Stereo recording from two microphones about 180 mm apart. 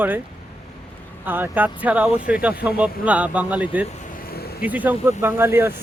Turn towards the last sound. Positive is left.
turn(degrees=-15)  # may be behind; listen again after turning